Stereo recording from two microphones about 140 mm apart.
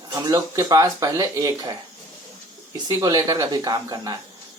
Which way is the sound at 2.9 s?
30° right (ahead or behind).